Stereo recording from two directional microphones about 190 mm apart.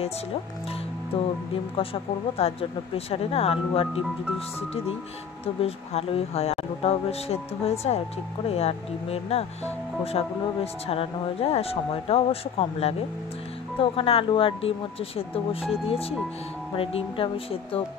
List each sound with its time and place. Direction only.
1.1 s speech: 30° left (ahead or behind)
2.3 s speech: 30° left (ahead or behind)
5.6 s speech: 30° left (ahead or behind)